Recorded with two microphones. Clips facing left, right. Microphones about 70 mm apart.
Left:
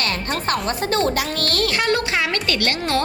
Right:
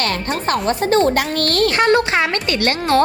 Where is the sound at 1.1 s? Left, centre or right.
Right.